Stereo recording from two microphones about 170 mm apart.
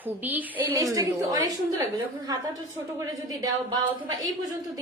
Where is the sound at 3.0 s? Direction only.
20° right (ahead or behind).